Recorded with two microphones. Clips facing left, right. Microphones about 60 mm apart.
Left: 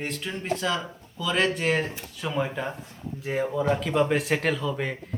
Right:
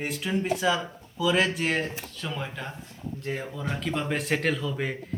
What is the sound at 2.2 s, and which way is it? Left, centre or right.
Speech, centre.